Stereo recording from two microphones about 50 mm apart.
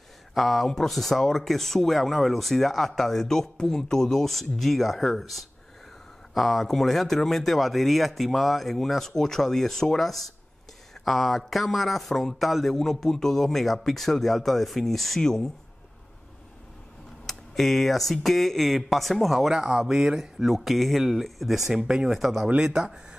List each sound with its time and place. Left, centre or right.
0.3 s speech: centre
17.3 s speech: centre
19.5 s speech: centre
22.2 s speech: centre
22.6 s speech: centre